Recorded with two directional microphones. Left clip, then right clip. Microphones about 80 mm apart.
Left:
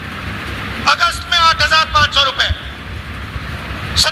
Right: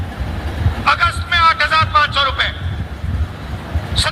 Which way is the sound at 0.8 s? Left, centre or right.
Left.